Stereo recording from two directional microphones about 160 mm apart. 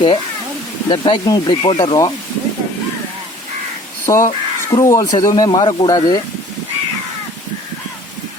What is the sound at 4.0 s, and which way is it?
Speech, 20° left (ahead or behind).